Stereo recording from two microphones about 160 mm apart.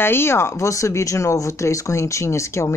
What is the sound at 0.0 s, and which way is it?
Speech, 15° left (ahead or behind).